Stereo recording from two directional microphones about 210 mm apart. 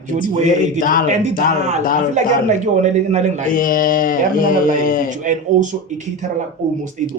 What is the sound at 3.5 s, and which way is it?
Speech, 40° left (ahead or behind).